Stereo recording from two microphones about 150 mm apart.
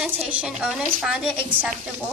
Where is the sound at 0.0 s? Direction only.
10° right (ahead or behind).